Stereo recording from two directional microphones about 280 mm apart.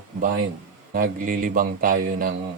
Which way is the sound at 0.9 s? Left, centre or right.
Right.